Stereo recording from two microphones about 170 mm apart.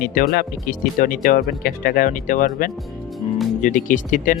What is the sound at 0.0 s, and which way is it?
Speech, 60° left (ahead or behind).